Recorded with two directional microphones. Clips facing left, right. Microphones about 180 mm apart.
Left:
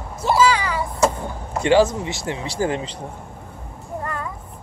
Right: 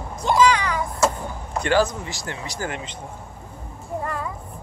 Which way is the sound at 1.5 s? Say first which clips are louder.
Left 4 dB; 25° left (ahead or behind).